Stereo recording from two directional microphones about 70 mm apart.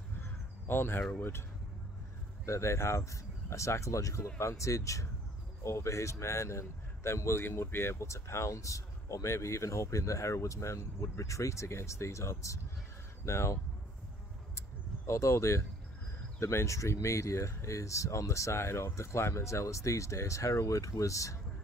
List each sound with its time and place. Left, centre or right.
0.2 s crow: left
2.4 s speech: left
15.0 s speech: left